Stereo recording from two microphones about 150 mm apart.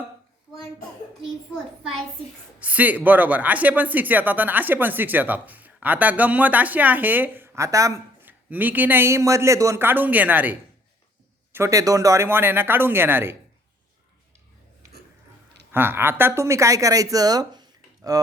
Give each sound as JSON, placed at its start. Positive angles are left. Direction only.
{"t": 2.6, "sound": "speech", "side_deg": -10}
{"t": 15.7, "sound": "speech", "side_deg": -15}